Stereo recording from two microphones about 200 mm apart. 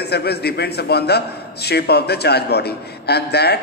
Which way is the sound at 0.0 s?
55° left (ahead or behind).